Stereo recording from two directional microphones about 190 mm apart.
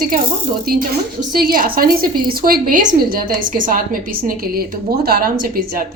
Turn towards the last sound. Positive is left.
turn(degrees=-50)  # may be behind; listen again after turning